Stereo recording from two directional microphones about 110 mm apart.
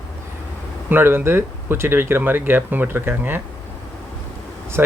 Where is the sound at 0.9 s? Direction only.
20° right (ahead or behind).